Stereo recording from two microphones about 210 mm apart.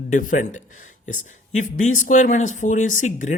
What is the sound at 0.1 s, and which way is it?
Speech, 40° left (ahead or behind).